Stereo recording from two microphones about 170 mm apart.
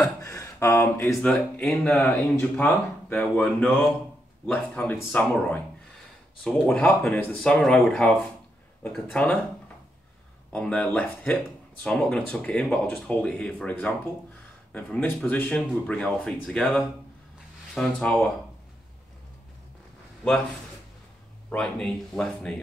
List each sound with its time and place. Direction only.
0.0 s speech: 20° left (ahead or behind)
1.3 s speech: 5° left (ahead or behind)
10.5 s speech: 5° left (ahead or behind)
21.5 s speech: 5° left (ahead or behind)